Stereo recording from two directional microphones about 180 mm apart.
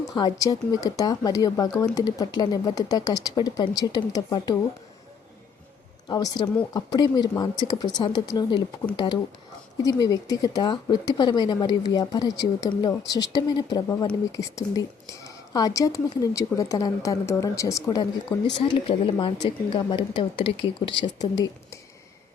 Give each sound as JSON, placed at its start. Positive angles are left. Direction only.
{"t": 0.1, "sound": "speech", "side_deg": 20}
{"t": 6.1, "sound": "speech", "side_deg": 25}
{"t": 18.0, "sound": "speech", "side_deg": 30}